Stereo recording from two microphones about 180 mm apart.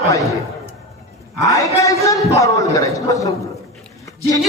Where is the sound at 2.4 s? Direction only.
20° left (ahead or behind).